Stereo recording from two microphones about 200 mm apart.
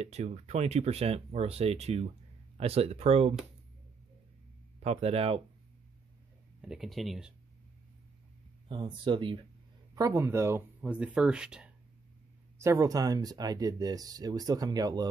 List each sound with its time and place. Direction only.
0.0 s speech: 35° right (ahead or behind)
4.8 s speech: 30° right (ahead or behind)
6.6 s speech: centre (ahead or behind)
8.6 s speech: 25° right (ahead or behind); by 11.7 s 5° right (ahead or behind)
12.5 s speech: 15° right (ahead or behind)